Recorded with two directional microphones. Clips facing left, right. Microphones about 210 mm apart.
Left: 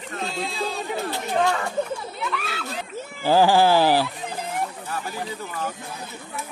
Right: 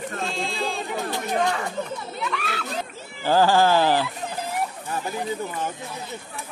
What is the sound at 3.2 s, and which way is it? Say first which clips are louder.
Speech: left 1 dB; 10° left (ahead or behind).